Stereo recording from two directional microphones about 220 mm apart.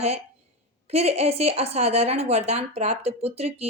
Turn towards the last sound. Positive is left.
turn(degrees=-30)  # may be behind; listen again after turning